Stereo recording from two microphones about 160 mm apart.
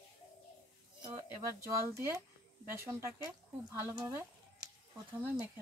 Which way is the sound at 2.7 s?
15° right (ahead or behind).